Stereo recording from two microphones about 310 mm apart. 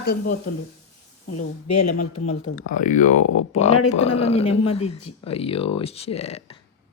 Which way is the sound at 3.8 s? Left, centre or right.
Left.